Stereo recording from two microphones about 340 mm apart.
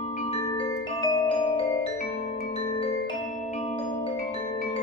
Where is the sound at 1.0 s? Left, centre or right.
Centre.